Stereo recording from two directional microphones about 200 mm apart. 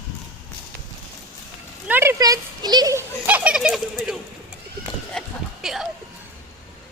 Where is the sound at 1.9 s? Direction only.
10° right (ahead or behind).